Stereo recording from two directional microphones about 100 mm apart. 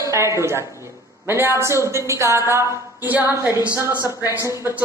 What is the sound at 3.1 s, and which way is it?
Speech, 15° right (ahead or behind).